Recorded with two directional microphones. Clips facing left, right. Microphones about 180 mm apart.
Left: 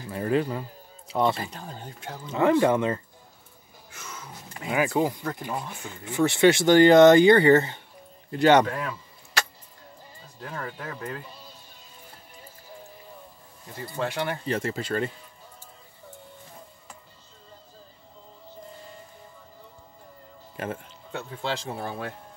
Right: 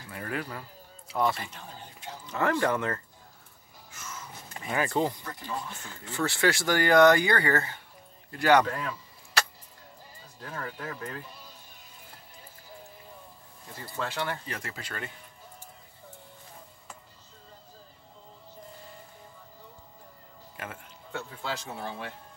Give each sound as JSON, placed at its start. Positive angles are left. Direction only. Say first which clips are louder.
{"t": 0.1, "sound": "speech", "louder": "left 10 dB", "side_deg": 25}
{"t": 1.4, "sound": "speech", "louder": "left 6 dB", "side_deg": 40}
{"t": 2.3, "sound": "speech", "louder": "left 6 dB", "side_deg": 20}
{"t": 4.6, "sound": "speech", "louder": "left 4 dB", "side_deg": 10}
{"t": 5.2, "sound": "speech", "louder": "left 6 dB", "side_deg": 55}
{"t": 5.7, "sound": "speech", "louder": "left 5 dB", "side_deg": 15}
{"t": 10.9, "sound": "speech", "louder": "left 3 dB", "side_deg": 20}
{"t": 13.9, "sound": "speech", "louder": "left 4 dB", "side_deg": 15}
{"t": 14.4, "sound": "speech", "louder": "left 11 dB", "side_deg": 30}
{"t": 20.5, "sound": "speech", "louder": "left 9 dB", "side_deg": 30}